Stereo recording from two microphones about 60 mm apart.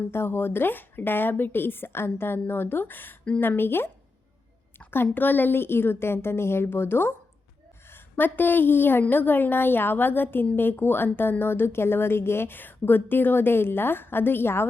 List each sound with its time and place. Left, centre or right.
0.1 s speech: left
5.1 s speech: left